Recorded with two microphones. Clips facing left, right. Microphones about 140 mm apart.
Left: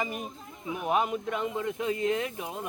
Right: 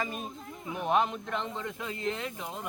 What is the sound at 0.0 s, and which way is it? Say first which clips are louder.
Speech: left 2 dB; 15° left (ahead or behind).